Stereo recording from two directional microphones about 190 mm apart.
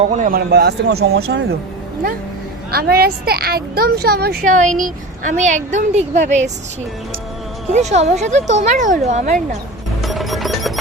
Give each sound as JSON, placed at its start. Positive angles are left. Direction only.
{"t": 0.1, "sound": "a woman's voice", "side_deg": -45}
{"t": 2.7, "sound": "a woman's voice", "side_deg": -55}
{"t": 4.5, "sound": "a woman's voice", "side_deg": -40}
{"t": 7.7, "sound": "a woman's voice", "side_deg": -35}
{"t": 10.0, "sound": "music", "side_deg": 0}